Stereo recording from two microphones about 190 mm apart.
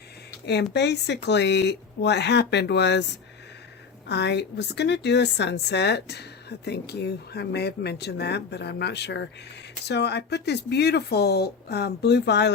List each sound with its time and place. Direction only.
0.4 s speech: 60° left (ahead or behind)
4.1 s speech: 65° left (ahead or behind)